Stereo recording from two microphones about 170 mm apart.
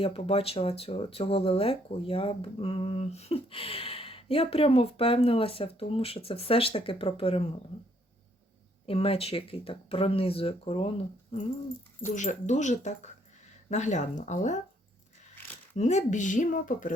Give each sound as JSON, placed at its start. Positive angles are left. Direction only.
{"t": 0.0, "sound": "speech", "side_deg": 35}
{"t": 8.9, "sound": "speech", "side_deg": 35}
{"t": 12.0, "sound": "speech", "side_deg": 45}
{"t": 15.7, "sound": "speech", "side_deg": 45}